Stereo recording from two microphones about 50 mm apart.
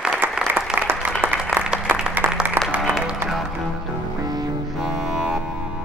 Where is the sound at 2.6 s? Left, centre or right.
Right.